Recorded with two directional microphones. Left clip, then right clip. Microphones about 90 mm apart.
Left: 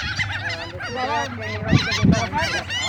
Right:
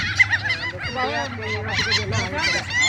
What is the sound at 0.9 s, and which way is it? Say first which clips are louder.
Goose: left 2 dB; 90° left.